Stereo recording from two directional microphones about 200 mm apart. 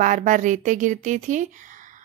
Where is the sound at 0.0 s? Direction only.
40° right (ahead or behind).